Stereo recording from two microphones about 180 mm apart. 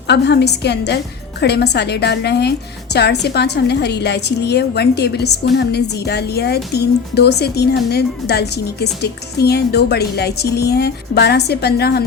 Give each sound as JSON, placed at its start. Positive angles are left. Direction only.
{"t": 0.1, "sound": "a woman's voice", "side_deg": 65}